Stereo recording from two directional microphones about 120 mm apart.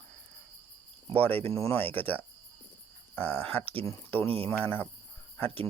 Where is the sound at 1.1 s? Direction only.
15° left (ahead or behind).